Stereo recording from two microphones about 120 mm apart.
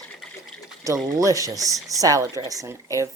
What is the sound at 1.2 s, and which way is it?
Speech, 30° right (ahead or behind).